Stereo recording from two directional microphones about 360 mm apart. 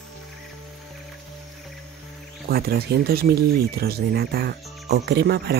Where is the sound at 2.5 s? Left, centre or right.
Right.